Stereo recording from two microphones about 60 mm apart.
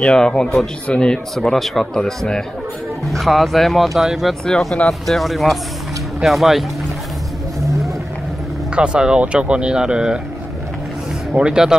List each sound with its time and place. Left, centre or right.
0.0 s speech: centre
1.3 s speech: centre
8.7 s speech: centre
11.3 s speech: centre